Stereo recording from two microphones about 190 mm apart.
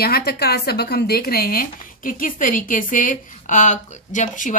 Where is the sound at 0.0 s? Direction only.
55° left (ahead or behind).